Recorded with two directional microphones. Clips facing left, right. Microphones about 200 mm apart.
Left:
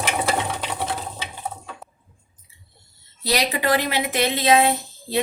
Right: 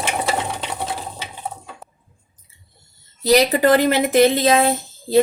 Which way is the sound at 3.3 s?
45° right (ahead or behind).